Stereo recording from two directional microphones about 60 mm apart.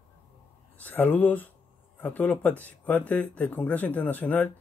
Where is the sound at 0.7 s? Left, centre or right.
Left.